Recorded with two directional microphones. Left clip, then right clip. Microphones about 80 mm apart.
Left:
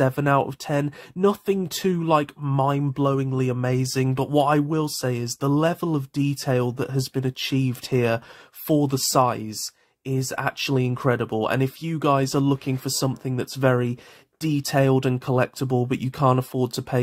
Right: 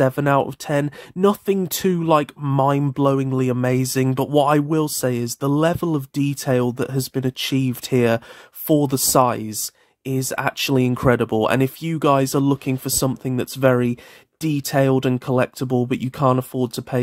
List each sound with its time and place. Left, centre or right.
0.0 s speech: right